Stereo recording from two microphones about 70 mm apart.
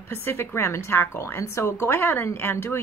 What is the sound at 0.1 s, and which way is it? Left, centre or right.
A woman's voice, left.